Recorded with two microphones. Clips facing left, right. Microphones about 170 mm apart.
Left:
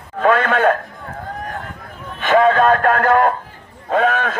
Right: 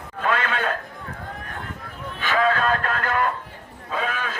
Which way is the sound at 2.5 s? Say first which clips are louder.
Left 9 dB; 50° left (ahead or behind).